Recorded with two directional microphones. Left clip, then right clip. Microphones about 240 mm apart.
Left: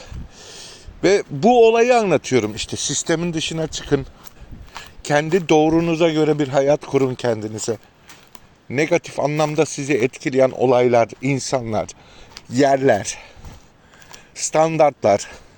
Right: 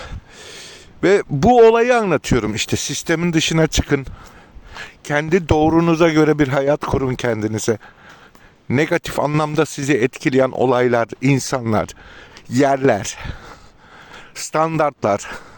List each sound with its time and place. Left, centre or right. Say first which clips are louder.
0.0 s a man's voice: right 4 dB; right
14.3 s a man's voice: left 2 dB; right